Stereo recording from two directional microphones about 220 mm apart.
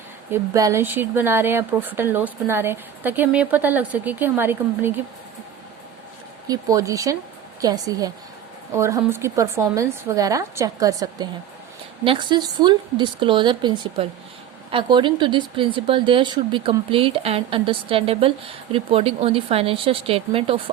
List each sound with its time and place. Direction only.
0.3 s speech: 15° right (ahead or behind)
6.5 s speech: 15° right (ahead or behind)